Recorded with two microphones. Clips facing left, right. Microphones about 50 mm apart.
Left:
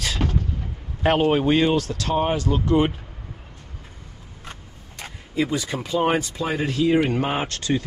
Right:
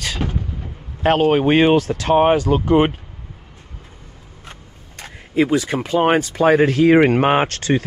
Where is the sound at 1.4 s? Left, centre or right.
Right.